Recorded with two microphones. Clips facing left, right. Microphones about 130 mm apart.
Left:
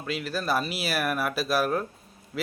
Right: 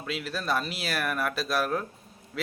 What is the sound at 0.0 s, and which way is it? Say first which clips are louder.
Speech: left 3 dB; centre (ahead or behind).